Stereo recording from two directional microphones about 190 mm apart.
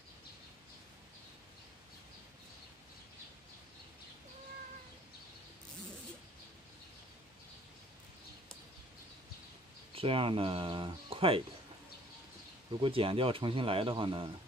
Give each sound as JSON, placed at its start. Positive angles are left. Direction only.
{"t": 9.9, "sound": "speech", "side_deg": -30}
{"t": 12.8, "sound": "speech", "side_deg": -30}